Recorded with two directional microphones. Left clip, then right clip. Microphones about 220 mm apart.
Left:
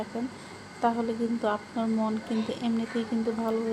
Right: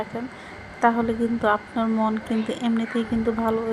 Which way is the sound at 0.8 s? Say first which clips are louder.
Right 6 dB; 15° right (ahead or behind).